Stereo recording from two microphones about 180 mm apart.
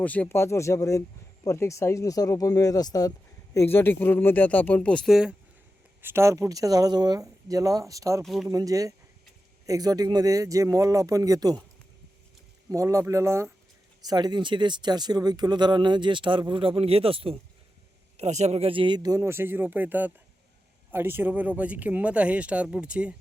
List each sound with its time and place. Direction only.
0.0 s speech: 10° left (ahead or behind)
6.0 s speech: 15° right (ahead or behind)
8.2 s speech: centre (ahead or behind)
8.4 s speech: 20° right (ahead or behind)
12.7 s speech: 15° right (ahead or behind)